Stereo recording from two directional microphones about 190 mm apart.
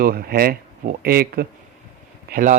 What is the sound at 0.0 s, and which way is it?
Speech, 55° right (ahead or behind).